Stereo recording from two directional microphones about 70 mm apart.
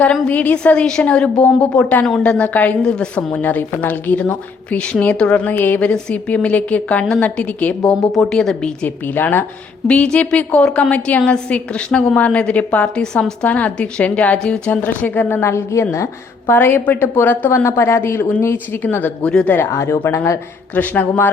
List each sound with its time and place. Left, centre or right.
0.0 s a woman's voice: centre
5.5 s speech: left
5.8 s speech: centre
7.9 s a woman's voice: centre
9.0 s a woman's voice: left
9.8 s a woman's voice: centre
17.6 s speech: left
19.7 s speech: left
20.7 s speech: left